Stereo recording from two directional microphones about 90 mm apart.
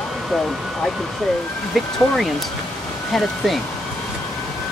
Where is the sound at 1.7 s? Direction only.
Centre (ahead or behind).